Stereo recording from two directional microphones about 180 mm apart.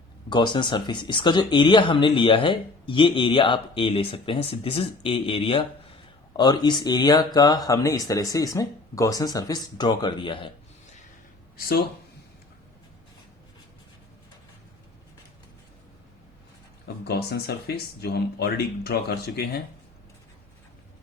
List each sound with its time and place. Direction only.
0.3 s speech: 25° left (ahead or behind)
11.5 s speech: 55° left (ahead or behind)
17.0 s speech: 65° left (ahead or behind)